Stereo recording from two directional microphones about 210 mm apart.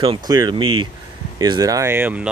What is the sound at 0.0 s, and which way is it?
Speech, 20° right (ahead or behind).